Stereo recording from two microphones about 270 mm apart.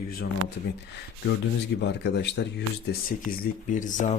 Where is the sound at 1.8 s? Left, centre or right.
Left.